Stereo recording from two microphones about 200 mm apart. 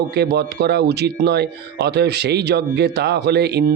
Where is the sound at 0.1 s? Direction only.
55° right (ahead or behind).